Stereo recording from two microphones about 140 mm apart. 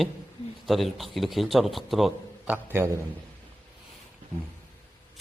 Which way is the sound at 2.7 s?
15° right (ahead or behind).